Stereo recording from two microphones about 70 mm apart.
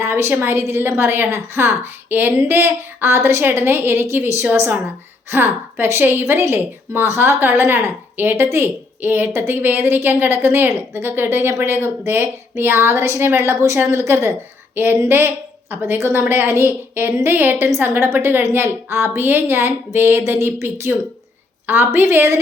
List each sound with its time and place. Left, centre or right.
0.0 s a woman's voice: right